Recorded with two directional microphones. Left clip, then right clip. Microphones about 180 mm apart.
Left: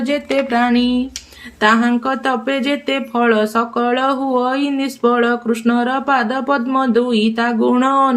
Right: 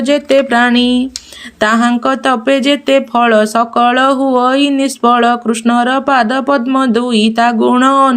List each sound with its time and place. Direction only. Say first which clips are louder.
0.0 s speech: right 7 dB; 40° right (ahead or behind)